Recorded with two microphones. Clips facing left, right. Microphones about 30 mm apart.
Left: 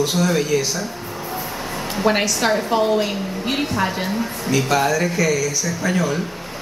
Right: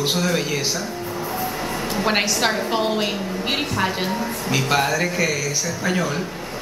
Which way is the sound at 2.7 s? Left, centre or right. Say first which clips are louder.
Left 3 dB; right.